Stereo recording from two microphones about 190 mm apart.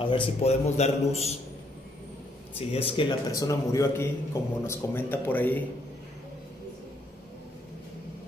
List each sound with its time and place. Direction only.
0.0 s a man's voice: 25° left (ahead or behind)
2.7 s a man's voice: 30° left (ahead or behind); by 5.7 s 10° left (ahead or behind)